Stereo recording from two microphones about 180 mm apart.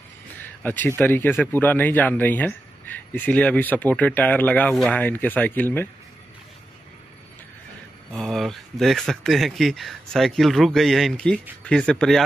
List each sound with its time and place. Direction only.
0.7 s speech: 10° left (ahead or behind)
8.1 s speech: centre (ahead or behind)